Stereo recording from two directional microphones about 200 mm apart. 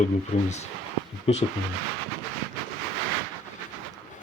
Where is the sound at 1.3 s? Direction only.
30° left (ahead or behind).